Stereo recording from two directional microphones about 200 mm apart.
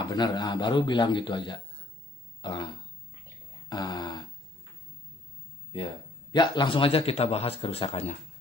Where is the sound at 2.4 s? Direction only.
20° left (ahead or behind).